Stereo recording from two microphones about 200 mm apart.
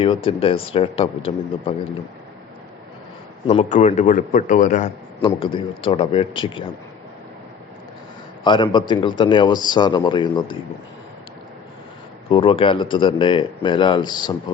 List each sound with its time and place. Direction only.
0.3 s speech: 30° left (ahead or behind)
3.4 s a man's voice: 30° left (ahead or behind)
5.2 s speech: 25° left (ahead or behind)
8.4 s speech: 25° left (ahead or behind)
12.3 s speech: 25° left (ahead or behind)